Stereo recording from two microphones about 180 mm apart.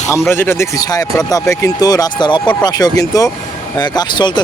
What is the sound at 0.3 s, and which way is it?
Speech, 15° left (ahead or behind).